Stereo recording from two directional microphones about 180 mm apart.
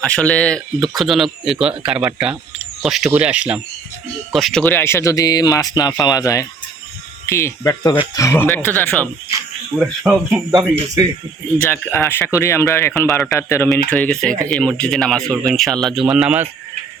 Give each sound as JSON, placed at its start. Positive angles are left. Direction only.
{"t": 0.0, "sound": "speech", "side_deg": 5}
{"t": 9.7, "sound": "speech", "side_deg": -5}
{"t": 11.9, "sound": "speech", "side_deg": 10}